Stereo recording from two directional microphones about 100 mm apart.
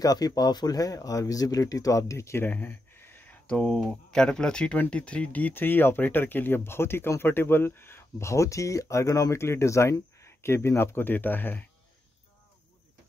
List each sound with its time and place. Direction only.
0.0 s speech: 40° left (ahead or behind); by 11.6 s 20° left (ahead or behind)